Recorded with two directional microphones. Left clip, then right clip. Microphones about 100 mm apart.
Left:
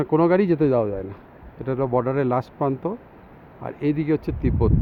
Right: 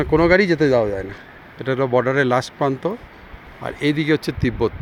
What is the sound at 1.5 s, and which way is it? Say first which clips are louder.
Speech: right 4 dB; 5° right (ahead or behind).